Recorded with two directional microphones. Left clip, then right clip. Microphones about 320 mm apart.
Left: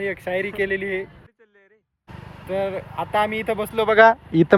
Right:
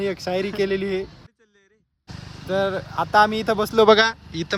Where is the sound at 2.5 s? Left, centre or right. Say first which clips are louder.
Right 2 dB; centre.